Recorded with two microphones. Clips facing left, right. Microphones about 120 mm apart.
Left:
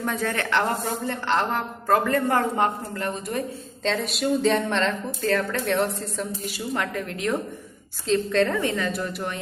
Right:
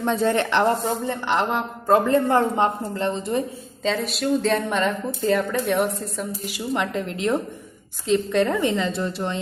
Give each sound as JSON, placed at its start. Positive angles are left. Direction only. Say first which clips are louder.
{"t": 0.0, "sound": "a woman's voice", "louder": "right 6 dB", "side_deg": -25}
{"t": 3.8, "sound": "a sound", "louder": "right 1 dB", "side_deg": 0}
{"t": 4.7, "sound": "a woman's voice", "louder": "right 2 dB", "side_deg": -10}
{"t": 6.7, "sound": "a woman's voice", "louder": "right 4 dB", "side_deg": -25}